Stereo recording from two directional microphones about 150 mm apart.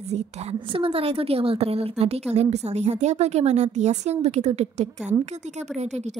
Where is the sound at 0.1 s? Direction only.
40° right (ahead or behind).